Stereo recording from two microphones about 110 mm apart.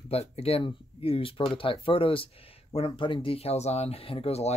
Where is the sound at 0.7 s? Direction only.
55° left (ahead or behind); by 4.6 s 75° left (ahead or behind).